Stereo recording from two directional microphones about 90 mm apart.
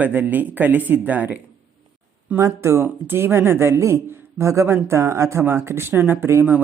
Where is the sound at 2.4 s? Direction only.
30° right (ahead or behind).